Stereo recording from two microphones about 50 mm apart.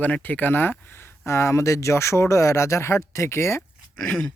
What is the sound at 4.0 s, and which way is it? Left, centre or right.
Speech, left.